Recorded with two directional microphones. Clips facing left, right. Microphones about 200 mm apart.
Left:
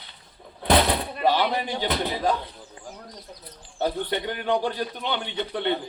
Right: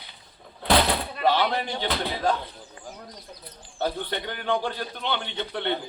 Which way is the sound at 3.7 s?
15° left (ahead or behind).